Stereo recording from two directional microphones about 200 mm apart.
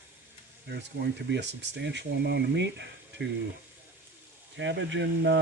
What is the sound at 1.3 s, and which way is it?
Speech, 60° right (ahead or behind).